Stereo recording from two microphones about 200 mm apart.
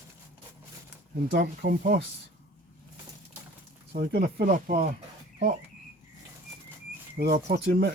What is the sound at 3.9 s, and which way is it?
Speech, 55° right (ahead or behind).